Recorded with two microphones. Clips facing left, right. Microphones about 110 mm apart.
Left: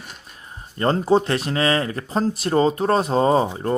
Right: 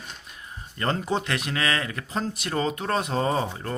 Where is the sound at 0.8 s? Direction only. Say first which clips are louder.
Left 8 dB; 35° left (ahead or behind).